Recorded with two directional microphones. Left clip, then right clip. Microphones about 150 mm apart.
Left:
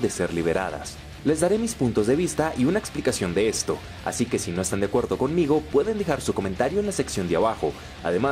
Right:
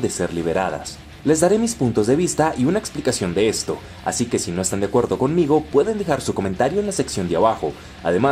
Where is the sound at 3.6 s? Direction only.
25° left (ahead or behind).